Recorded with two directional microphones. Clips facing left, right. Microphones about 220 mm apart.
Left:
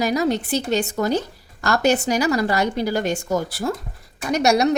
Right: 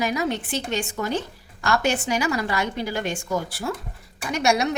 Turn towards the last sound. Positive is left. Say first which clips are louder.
# left 5 dB
turn(degrees=40)  # may be behind; listen again after turning